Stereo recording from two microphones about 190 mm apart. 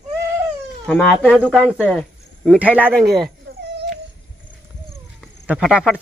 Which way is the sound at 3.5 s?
60° right (ahead or behind).